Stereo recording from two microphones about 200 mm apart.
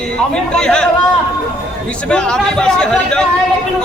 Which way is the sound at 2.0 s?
5° left (ahead or behind).